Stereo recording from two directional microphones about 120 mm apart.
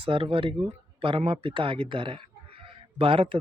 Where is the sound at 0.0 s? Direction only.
45° right (ahead or behind).